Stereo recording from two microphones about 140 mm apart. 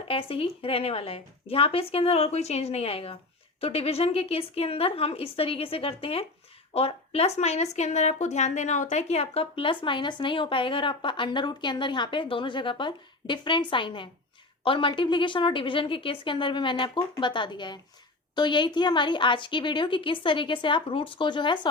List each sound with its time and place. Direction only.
0.1 s speech: 40° left (ahead or behind)